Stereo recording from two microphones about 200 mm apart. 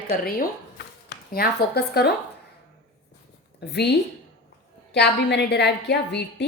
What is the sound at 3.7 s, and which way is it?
Speech, 55° left (ahead or behind).